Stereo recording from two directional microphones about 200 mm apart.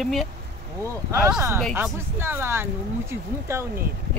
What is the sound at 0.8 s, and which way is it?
Speech, 15° right (ahead or behind).